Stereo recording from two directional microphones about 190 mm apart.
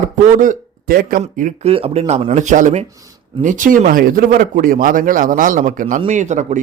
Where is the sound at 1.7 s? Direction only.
30° right (ahead or behind).